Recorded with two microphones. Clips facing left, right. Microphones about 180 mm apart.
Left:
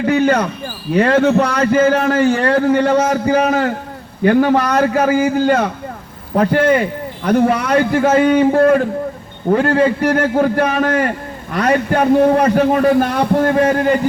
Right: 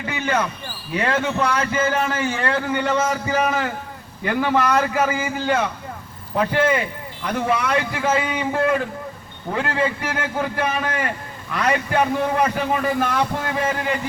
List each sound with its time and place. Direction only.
0.0 s a man's voice: 40° left (ahead or behind)